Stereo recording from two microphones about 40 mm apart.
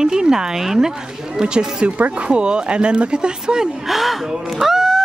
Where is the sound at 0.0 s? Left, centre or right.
Centre.